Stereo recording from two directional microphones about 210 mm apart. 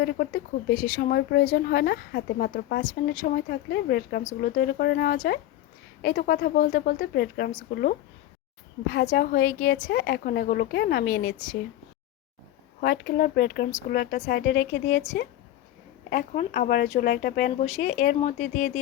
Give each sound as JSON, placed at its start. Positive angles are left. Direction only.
{"t": 0.0, "sound": "speech", "side_deg": 50}
{"t": 8.9, "sound": "speech", "side_deg": 45}
{"t": 9.9, "sound": "speech", "side_deg": 50}
{"t": 12.8, "sound": "speech", "side_deg": 50}